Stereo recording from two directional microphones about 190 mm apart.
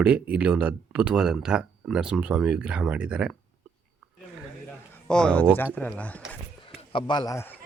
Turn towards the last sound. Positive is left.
turn(degrees=10)  # may be behind; listen again after turning